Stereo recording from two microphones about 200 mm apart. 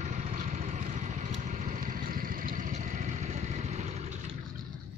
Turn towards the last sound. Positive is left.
turn(degrees=-35)  # may be behind; listen again after turning